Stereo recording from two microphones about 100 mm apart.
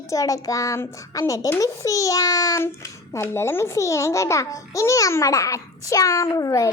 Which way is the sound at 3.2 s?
25° left (ahead or behind).